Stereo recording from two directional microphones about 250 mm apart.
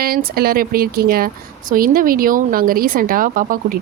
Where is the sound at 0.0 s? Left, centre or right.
Right.